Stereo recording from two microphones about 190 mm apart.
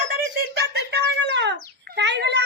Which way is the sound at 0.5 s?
60° right (ahead or behind).